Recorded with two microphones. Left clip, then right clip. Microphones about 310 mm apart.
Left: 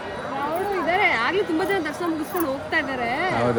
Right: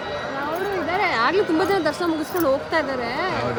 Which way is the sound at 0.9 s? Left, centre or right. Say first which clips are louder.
Right 1 dB; centre.